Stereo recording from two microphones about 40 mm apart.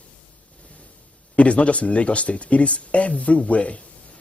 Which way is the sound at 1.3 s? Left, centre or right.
Left.